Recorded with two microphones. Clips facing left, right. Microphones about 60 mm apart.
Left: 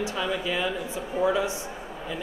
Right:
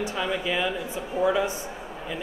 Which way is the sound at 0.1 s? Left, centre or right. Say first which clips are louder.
Right 1 dB; centre.